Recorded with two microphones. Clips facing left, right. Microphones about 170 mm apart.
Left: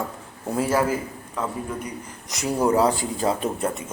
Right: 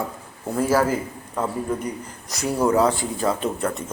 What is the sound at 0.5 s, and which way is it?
Speech, 5° left (ahead or behind).